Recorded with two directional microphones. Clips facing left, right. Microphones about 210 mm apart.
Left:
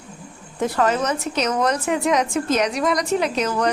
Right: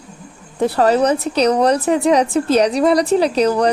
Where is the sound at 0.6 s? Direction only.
35° right (ahead or behind).